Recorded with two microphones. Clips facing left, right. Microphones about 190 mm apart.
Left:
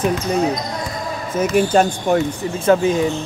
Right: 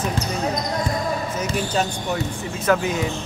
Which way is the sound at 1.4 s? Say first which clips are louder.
Left 11 dB; 50° left (ahead or behind).